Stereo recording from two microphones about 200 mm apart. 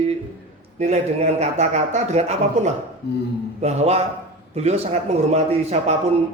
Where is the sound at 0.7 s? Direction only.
35° right (ahead or behind).